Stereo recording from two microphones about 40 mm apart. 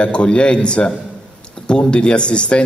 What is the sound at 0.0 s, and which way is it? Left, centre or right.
A man's voice, left.